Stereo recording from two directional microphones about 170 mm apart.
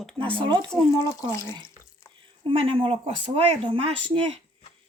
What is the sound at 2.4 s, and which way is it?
Speech, 35° right (ahead or behind).